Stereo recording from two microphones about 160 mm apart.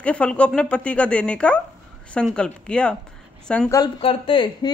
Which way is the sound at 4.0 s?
35° left (ahead or behind).